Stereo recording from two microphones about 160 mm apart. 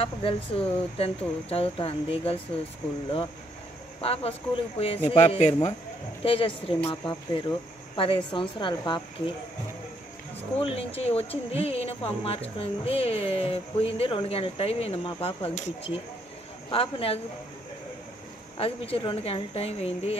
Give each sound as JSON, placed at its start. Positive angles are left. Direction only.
{"t": 0.0, "sound": "speech", "side_deg": 35}
{"t": 4.0, "sound": "speech", "side_deg": 35}
{"t": 10.6, "sound": "speech", "side_deg": 35}
{"t": 18.6, "sound": "speech", "side_deg": 35}